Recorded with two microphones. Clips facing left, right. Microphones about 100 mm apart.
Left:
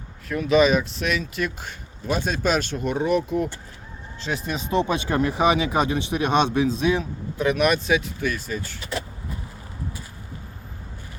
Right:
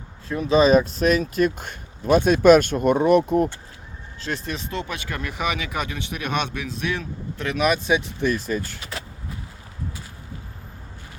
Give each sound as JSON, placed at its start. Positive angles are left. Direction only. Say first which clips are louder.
{"t": 0.3, "sound": "speech", "louder": "right 1 dB", "side_deg": -30}
{"t": 4.2, "sound": "speech", "louder": "left 1 dB", "side_deg": 5}
{"t": 4.7, "sound": "speech", "louder": "left 12 dB", "side_deg": 20}
{"t": 7.9, "sound": "speech", "louder": "right 2 dB", "side_deg": -30}